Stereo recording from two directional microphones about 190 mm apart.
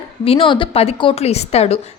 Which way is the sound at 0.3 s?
30° left (ahead or behind).